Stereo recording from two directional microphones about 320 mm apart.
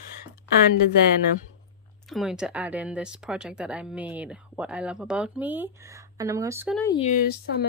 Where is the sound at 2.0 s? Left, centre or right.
Centre.